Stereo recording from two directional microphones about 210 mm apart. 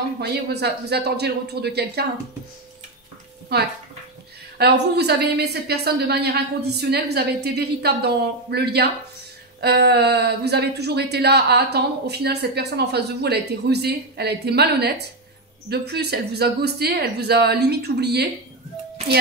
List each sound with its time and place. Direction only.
0.2 s speech: 50° right (ahead or behind)
3.5 s speech: 50° right (ahead or behind)